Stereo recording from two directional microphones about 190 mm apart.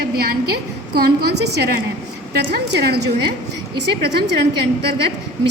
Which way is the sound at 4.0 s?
65° right (ahead or behind).